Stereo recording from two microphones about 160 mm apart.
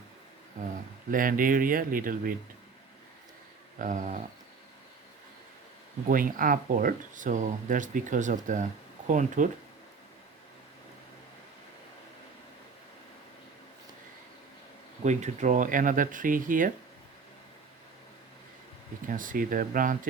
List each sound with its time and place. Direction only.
1.1 s speech: 60° right (ahead or behind)
3.8 s speech: 50° right (ahead or behind)
6.1 s speech: 60° right (ahead or behind)
15.0 s speech: 50° right (ahead or behind)
19.0 s speech: 55° right (ahead or behind)